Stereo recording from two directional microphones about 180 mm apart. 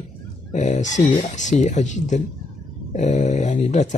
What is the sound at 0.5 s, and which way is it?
Speech, 40° left (ahead or behind).